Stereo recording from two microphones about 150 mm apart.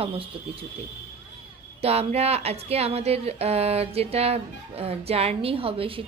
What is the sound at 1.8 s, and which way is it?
A woman's voice, 45° right (ahead or behind).